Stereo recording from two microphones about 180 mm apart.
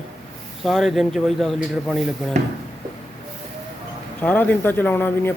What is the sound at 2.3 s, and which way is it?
Speech, 40° right (ahead or behind).